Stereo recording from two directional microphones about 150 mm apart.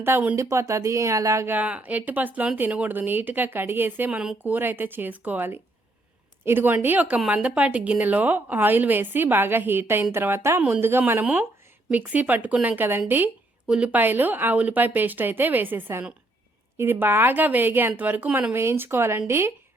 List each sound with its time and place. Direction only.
0.0 s speech: 15° right (ahead or behind)